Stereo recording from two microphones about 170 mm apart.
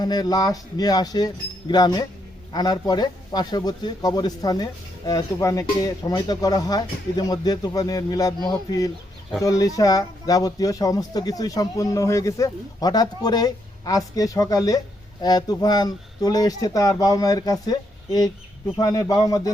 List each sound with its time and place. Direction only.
0.0 s speech: 25° left (ahead or behind)